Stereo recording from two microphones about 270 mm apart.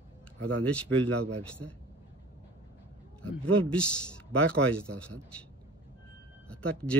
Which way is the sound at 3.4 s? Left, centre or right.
Centre.